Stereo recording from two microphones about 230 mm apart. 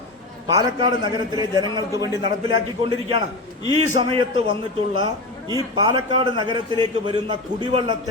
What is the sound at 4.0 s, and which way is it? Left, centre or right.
Speech, right.